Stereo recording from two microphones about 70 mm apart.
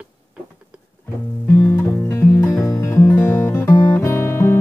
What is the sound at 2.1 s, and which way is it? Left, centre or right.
Music, left.